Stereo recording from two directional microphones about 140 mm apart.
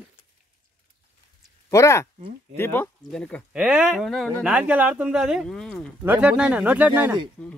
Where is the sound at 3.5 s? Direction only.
5° right (ahead or behind).